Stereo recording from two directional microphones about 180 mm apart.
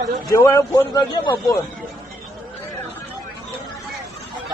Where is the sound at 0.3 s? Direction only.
15° left (ahead or behind).